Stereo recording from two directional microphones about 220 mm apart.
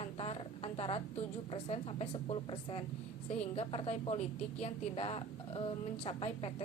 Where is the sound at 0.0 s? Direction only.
25° left (ahead or behind).